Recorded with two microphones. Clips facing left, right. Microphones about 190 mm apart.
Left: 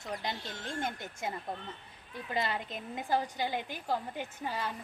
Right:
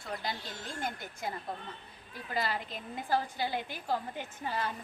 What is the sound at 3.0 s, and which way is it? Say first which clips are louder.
Speech: even; 15° left (ahead or behind).